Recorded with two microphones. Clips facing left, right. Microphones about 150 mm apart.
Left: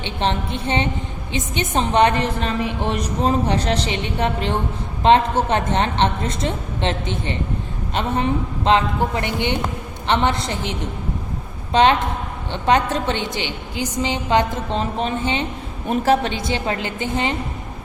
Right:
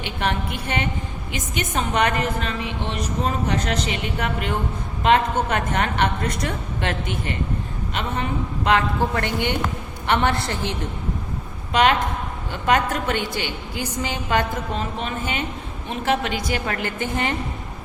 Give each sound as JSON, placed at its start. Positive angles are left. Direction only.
{"t": 0.0, "sound": "a woman's voice", "side_deg": 25}
{"t": 14.8, "sound": "a woman's voice", "side_deg": 35}